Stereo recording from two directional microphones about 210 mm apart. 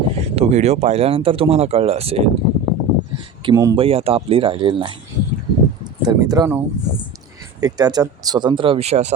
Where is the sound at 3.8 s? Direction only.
25° right (ahead or behind).